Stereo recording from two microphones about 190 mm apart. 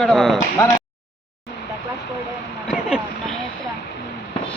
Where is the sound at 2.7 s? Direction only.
5° right (ahead or behind).